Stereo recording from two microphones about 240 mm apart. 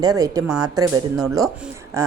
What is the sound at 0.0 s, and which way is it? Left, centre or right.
Speech, centre.